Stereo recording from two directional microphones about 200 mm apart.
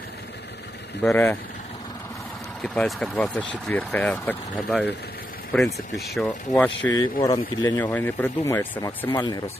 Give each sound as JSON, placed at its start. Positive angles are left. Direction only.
{"t": 1.0, "sound": "speech", "side_deg": 10}
{"t": 2.6, "sound": "speech", "side_deg": 5}
{"t": 4.5, "sound": "speech", "side_deg": -5}
{"t": 6.9, "sound": "speech", "side_deg": 20}